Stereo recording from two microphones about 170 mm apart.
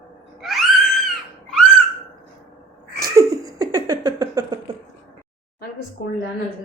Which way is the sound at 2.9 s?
20° right (ahead or behind).